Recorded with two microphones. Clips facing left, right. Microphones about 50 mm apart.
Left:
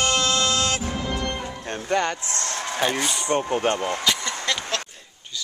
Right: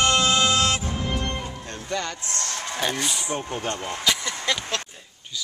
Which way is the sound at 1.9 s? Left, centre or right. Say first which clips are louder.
Left 6 dB; left.